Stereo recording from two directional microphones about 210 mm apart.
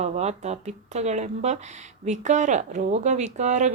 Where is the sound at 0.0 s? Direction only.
30° right (ahead or behind).